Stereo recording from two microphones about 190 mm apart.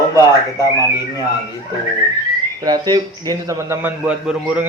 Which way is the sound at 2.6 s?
20° right (ahead or behind).